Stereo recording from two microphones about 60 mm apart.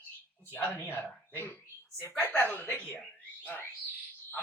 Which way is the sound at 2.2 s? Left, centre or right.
Left.